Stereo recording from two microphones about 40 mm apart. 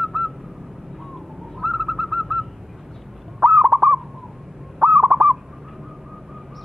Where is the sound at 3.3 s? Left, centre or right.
Centre.